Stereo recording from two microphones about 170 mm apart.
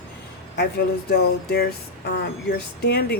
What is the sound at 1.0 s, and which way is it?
Speech, 70° left (ahead or behind).